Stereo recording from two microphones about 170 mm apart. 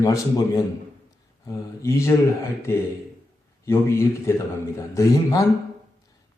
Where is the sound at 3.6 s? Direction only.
15° left (ahead or behind).